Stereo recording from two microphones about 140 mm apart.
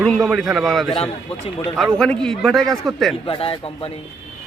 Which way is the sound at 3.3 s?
40° left (ahead or behind).